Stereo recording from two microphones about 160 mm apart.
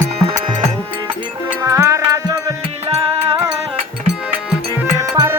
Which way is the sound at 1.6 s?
20° right (ahead or behind).